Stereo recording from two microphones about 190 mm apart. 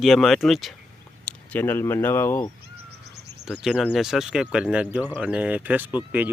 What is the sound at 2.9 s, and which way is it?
Insect, 60° right (ahead or behind).